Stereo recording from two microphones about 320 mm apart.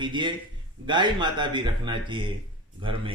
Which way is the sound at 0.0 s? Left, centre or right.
Centre.